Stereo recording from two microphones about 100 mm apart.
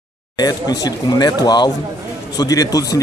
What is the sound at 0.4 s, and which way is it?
Speech, 40° left (ahead or behind).